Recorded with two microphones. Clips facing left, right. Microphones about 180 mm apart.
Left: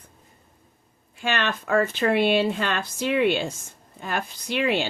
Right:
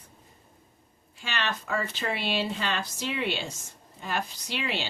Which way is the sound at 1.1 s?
55° left (ahead or behind).